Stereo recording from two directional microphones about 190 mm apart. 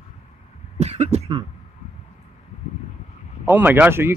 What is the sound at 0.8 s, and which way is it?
Speech, 35° right (ahead or behind).